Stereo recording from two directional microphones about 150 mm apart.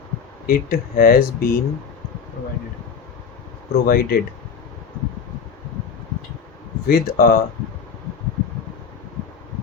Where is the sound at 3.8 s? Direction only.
90° left.